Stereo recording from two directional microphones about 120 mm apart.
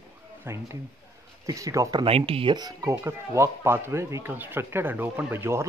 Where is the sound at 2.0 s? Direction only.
55° right (ahead or behind); by 2.9 s 35° right (ahead or behind).